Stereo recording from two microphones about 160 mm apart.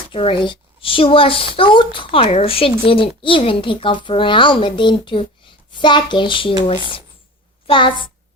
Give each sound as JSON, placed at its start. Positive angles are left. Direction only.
{"t": 0.1, "sound": "a child's voice", "side_deg": 35}